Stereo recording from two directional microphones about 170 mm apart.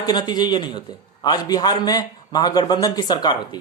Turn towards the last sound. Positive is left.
turn(degrees=25)  # may be behind; listen again after turning